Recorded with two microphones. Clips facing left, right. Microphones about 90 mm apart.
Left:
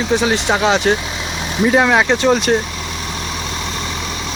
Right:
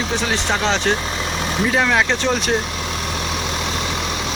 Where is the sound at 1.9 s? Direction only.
10° left (ahead or behind).